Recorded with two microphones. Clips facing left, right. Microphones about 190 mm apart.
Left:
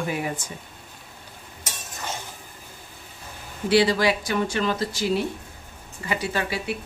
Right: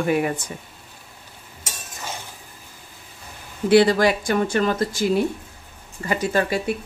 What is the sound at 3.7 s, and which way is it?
Speech, 50° right (ahead or behind).